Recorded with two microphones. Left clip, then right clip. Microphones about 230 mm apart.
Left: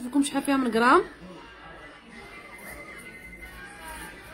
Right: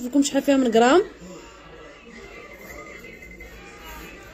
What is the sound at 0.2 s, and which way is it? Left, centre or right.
Speech, centre.